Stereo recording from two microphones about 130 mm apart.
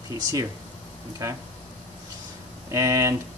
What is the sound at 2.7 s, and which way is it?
Speech, 25° right (ahead or behind).